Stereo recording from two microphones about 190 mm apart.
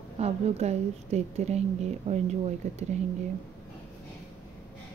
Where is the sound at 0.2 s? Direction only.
35° right (ahead or behind).